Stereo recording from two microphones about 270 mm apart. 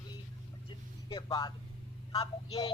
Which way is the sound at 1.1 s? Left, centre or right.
Centre.